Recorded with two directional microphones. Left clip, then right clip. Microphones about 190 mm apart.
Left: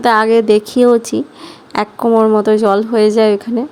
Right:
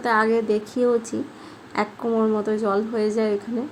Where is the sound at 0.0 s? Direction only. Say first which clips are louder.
Left 10 dB; 55° left (ahead or behind).